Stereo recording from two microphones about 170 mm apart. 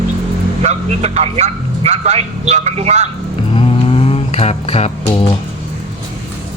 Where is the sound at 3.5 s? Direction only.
35° left (ahead or behind).